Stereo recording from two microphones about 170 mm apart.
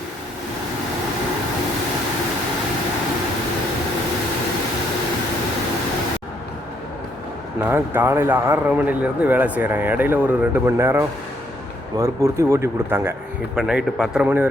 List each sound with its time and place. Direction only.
7.6 s a man's voice: 10° right (ahead or behind)
13.6 s a man's voice: 5° right (ahead or behind)